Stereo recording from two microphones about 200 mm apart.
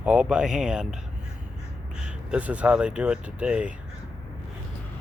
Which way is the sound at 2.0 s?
5° right (ahead or behind).